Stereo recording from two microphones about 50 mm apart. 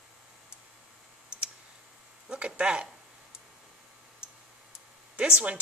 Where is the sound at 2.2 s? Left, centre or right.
Centre.